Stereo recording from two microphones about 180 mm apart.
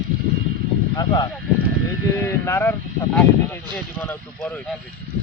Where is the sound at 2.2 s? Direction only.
15° left (ahead or behind).